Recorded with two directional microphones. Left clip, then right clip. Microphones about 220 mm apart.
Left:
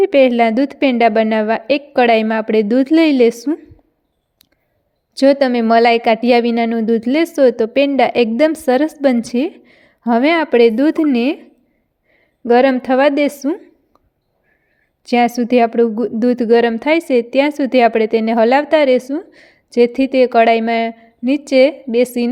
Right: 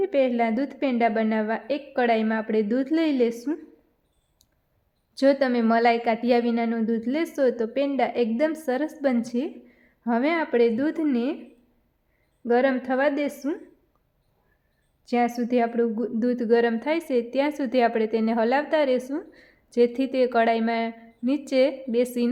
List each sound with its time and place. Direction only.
0.0 s a woman's voice: 35° left (ahead or behind)
5.1 s a woman's voice: 30° left (ahead or behind)
12.5 s a woman's voice: 35° left (ahead or behind)
15.0 s a woman's voice: 35° left (ahead or behind)